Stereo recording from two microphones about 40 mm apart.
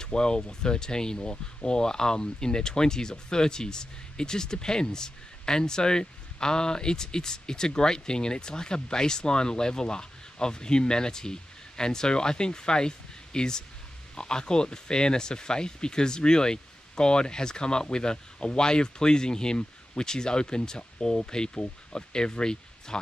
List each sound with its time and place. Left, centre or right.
0.0 s speech: centre